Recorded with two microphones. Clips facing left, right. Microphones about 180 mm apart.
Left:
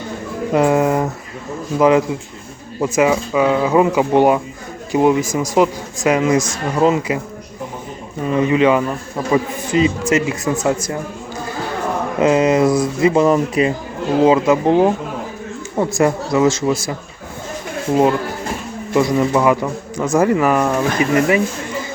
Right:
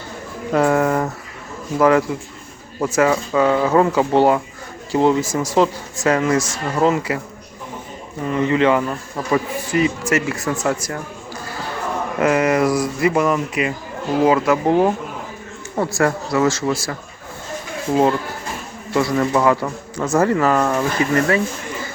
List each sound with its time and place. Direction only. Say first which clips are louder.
0.5 s a man's voice: left 2 dB; 20° left (ahead or behind)
8.2 s a man's voice: left 3 dB; 20° left (ahead or behind)
12.2 s a man's voice: left 3 dB; 20° left (ahead or behind)
14.2 s a man's voice: left 3 dB; 20° left (ahead or behind)
18.9 s a man's voice: left 2 dB; 15° left (ahead or behind)